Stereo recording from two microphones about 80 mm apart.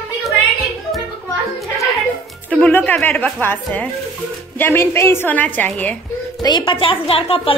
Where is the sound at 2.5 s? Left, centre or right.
Left.